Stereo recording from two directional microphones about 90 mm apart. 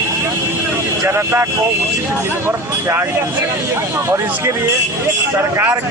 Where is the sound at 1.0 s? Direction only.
30° right (ahead or behind).